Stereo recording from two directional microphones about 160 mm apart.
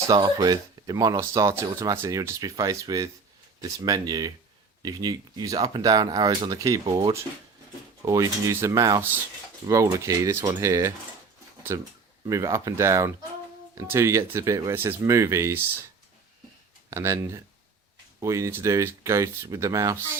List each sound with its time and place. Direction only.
0.1 s speech: 25° right (ahead or behind)
16.9 s speech: 20° right (ahead or behind)